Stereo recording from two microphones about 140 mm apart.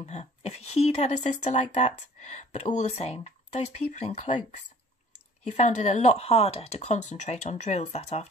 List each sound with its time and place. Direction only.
0.0 s speech: 50° left (ahead or behind)